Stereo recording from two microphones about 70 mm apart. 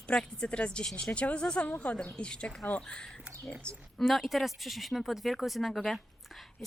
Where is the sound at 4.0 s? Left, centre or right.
Centre.